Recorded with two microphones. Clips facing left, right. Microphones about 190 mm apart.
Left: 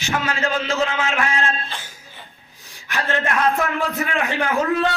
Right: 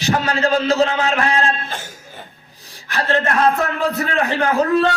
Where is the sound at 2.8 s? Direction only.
35° right (ahead or behind).